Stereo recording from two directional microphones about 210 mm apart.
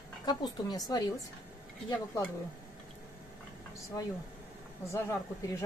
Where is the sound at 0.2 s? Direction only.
20° left (ahead or behind).